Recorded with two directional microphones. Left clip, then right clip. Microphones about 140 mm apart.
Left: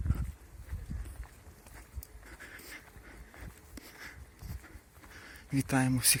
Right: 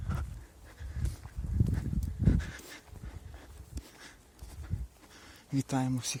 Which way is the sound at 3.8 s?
10° right (ahead or behind).